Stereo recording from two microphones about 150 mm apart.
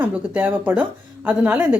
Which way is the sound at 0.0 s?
10° right (ahead or behind).